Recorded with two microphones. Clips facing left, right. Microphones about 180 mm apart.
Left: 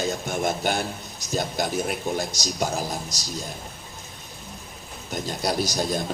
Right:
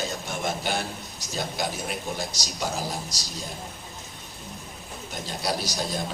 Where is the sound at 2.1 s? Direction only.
45° left (ahead or behind).